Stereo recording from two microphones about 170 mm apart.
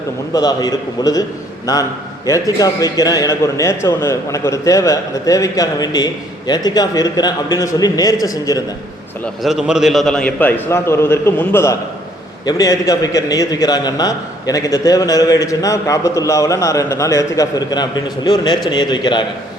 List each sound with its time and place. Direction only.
0.3 s a man's voice: 20° left (ahead or behind)
9.4 s a man's voice: centre (ahead or behind); by 19.2 s 25° left (ahead or behind)